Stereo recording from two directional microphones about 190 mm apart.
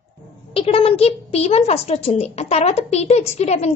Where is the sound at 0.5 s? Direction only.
30° left (ahead or behind).